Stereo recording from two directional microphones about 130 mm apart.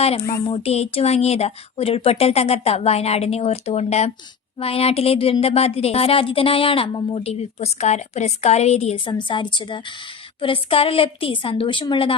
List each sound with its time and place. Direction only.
0.4 s a woman's voice: 45° left (ahead or behind)
9.0 s a woman's voice: 35° left (ahead or behind)